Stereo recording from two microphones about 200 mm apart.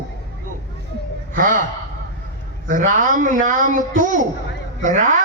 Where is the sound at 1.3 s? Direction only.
45° right (ahead or behind).